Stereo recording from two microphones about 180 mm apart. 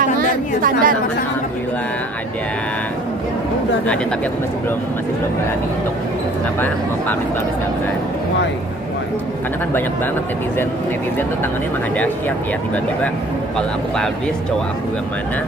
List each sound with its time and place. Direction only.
0.0 s chatter: 50° right (ahead or behind)
13.6 s speech: 5° left (ahead or behind)